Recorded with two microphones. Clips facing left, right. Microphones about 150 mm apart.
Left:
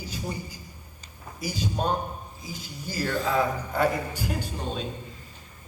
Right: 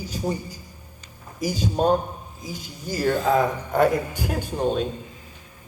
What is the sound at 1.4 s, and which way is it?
A man's voice, 45° right (ahead or behind).